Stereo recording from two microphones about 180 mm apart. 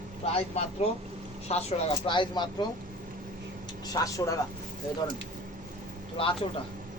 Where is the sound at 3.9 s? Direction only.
20° left (ahead or behind).